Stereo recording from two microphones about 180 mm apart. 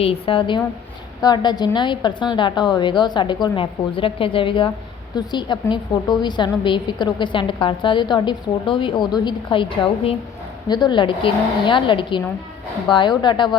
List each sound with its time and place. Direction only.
0.0 s a woman's voice: 30° left (ahead or behind)